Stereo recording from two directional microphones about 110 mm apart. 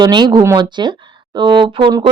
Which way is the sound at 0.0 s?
40° right (ahead or behind).